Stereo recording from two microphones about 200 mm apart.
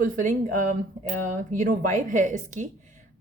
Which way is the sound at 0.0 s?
40° right (ahead or behind).